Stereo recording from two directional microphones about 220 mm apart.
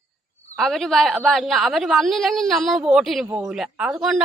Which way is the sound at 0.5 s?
Centre (ahead or behind).